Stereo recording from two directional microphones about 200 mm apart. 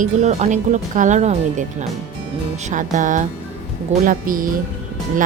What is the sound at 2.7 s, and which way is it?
A woman's voice, 40° right (ahead or behind).